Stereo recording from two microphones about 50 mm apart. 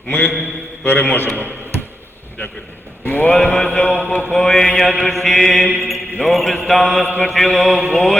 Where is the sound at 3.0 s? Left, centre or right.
Left.